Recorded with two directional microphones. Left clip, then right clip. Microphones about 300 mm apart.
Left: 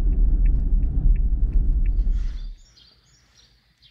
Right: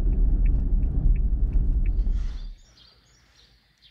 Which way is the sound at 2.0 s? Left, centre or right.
Centre.